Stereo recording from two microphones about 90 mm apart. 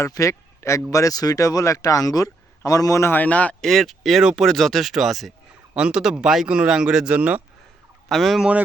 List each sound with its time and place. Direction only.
0.0 s speech: 35° left (ahead or behind)
3.2 s speech: 15° left (ahead or behind)
3.7 s speech: centre (ahead or behind)
4.4 s speech: 5° left (ahead or behind); by 7.4 s 15° right (ahead or behind)
8.1 s speech: centre (ahead or behind)